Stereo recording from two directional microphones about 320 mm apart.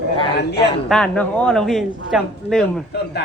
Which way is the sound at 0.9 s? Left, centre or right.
Centre.